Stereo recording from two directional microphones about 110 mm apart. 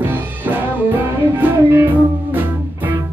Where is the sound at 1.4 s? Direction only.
20° right (ahead or behind).